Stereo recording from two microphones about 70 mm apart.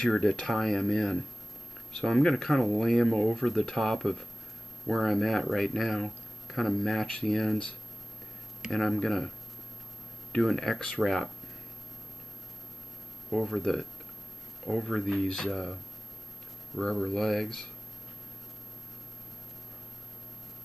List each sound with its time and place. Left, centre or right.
0.0 s speech: centre
8.7 s speech: centre
10.3 s speech: centre
13.3 s speech: centre